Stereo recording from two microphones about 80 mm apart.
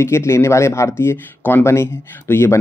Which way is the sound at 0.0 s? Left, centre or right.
Left.